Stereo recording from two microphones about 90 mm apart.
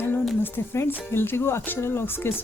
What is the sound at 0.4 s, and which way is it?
Speech, 25° left (ahead or behind).